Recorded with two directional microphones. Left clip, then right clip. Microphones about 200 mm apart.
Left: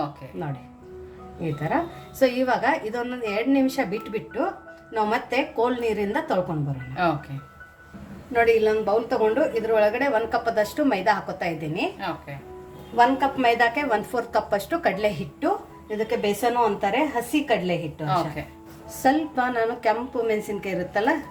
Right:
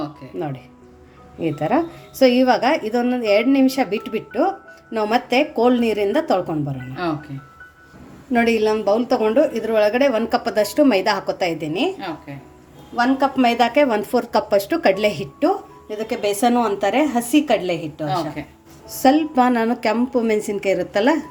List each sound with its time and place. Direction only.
1.4 s a woman's voice: 40° right (ahead or behind)
8.3 s a woman's voice: 45° right (ahead or behind)
13.0 s a woman's voice: 45° right (ahead or behind)
18.0 s speech: 10° right (ahead or behind)
19.0 s a woman's voice: 45° right (ahead or behind)